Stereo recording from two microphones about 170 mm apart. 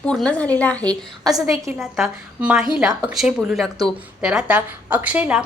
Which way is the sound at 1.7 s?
5° right (ahead or behind).